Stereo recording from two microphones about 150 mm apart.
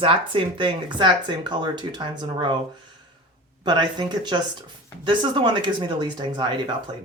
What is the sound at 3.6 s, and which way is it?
Speech, 30° right (ahead or behind).